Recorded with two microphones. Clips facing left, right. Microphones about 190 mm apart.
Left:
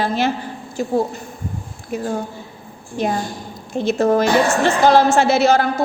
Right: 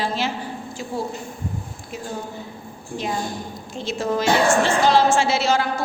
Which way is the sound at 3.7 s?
60° left (ahead or behind).